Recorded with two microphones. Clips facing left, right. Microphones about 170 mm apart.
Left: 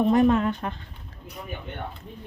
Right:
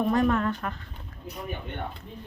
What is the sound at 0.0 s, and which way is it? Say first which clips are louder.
Speech: left 4 dB; 20° left (ahead or behind).